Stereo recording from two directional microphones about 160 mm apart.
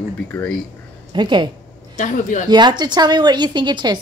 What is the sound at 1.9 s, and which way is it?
Speech, 50° left (ahead or behind).